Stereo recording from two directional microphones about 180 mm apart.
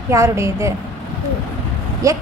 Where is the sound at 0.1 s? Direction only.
15° right (ahead or behind).